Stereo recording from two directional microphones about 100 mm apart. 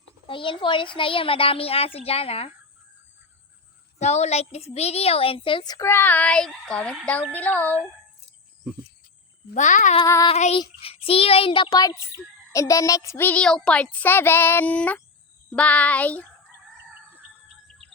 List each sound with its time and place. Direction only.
0.3 s speech: 55° left (ahead or behind); by 2.5 s 80° left
3.9 s a woman's voice: 90° left; by 5.6 s 60° left (ahead or behind)
5.8 s speech: 20° left (ahead or behind)
10.2 s child singing: 75° left (ahead or behind); by 11.8 s 55° left (ahead or behind)
11.8 s child singing: 35° left (ahead or behind)
13.2 s speech: 10° left (ahead or behind)